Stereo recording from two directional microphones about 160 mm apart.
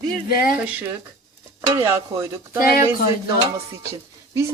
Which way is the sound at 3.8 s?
15° right (ahead or behind).